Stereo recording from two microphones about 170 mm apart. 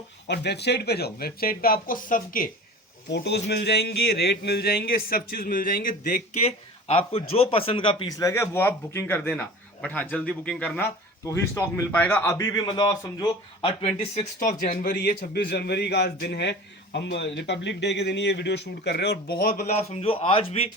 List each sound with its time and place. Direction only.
0.3 s speech: 80° left; by 2.5 s 55° left (ahead or behind)
3.1 s speech: 90° left; by 6.2 s 55° left (ahead or behind)
6.8 s a man's voice: 35° left (ahead or behind); by 10.8 s 5° left (ahead or behind)
11.3 s a man's voice: 20° left (ahead or behind)
12.6 s speech: 25° left (ahead or behind)
14.3 s a man's voice: 55° left (ahead or behind)
19.9 s speech: 35° left (ahead or behind)